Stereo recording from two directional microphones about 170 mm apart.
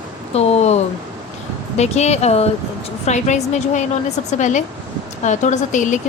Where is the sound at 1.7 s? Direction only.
40° left (ahead or behind).